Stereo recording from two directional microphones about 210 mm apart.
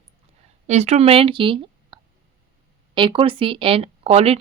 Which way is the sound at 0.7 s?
30° right (ahead or behind).